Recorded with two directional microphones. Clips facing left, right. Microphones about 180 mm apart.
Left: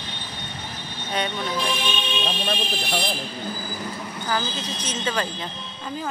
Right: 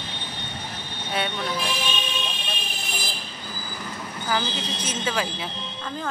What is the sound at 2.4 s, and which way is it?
Vehicle, 65° left (ahead or behind).